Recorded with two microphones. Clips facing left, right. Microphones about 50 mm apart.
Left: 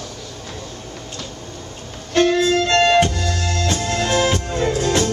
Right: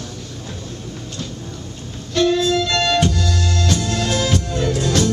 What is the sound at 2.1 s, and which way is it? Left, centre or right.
Music, left.